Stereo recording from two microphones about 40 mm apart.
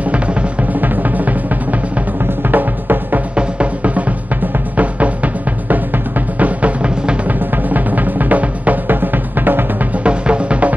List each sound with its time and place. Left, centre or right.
0.0 s music: right
0.7 s music: right
2.4 s drum: right
3.3 s music: right
7.2 s music: right
8.9 s music: right
10.0 s music: right